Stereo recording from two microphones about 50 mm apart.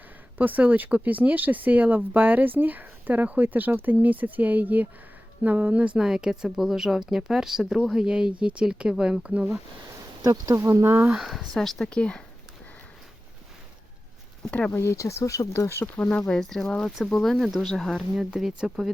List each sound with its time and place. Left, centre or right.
0.3 s speech: right
6.0 s speech: centre
10.5 s speech: right
10.8 s speech: right
11.5 s speech: centre
11.9 s speech: centre
14.7 s speech: left
16.0 s speech: left
16.2 s speech: centre
17.3 s speech: centre
17.6 s speech: centre
18.2 s speech: centre